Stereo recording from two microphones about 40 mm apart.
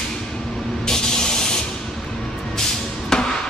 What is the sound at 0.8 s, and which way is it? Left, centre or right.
Spray, centre.